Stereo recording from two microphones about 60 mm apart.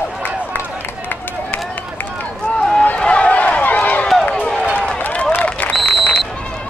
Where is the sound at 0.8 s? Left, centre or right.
Left.